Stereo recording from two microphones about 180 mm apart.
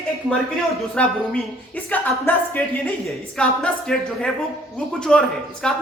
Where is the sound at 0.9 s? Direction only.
5° left (ahead or behind).